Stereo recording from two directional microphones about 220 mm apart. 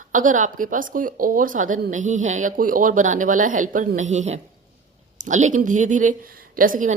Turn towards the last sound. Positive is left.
turn(degrees=-35)  # may be behind; listen again after turning